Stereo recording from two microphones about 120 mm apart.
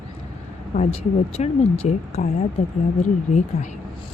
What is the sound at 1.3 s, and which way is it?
Speech, 60° left (ahead or behind).